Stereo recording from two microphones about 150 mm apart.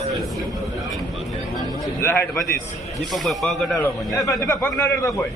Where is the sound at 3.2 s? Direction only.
Centre (ahead or behind).